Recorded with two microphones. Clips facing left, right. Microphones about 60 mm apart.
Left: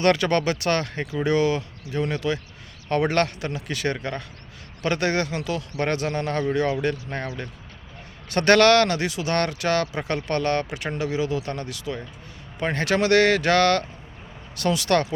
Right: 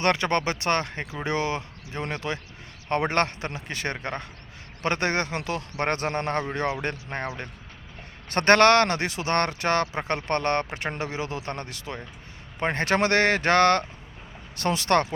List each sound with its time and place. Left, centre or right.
0.0 s speech: right